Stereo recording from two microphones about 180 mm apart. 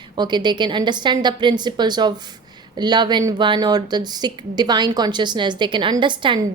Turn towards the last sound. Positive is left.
turn(degrees=-25)  # may be behind; listen again after turning